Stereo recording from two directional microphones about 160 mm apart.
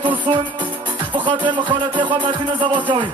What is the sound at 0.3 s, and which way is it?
Music, 40° right (ahead or behind).